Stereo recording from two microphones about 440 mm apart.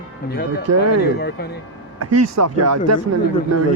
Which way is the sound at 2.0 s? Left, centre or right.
Right.